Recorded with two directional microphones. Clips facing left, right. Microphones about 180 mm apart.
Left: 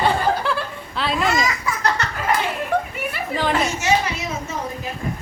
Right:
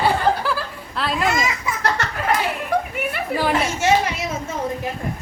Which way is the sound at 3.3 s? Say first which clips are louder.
Right 1 dB; 10° right (ahead or behind).